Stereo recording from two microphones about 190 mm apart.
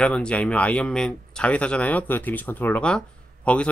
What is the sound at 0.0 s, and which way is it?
Speech, 5° left (ahead or behind).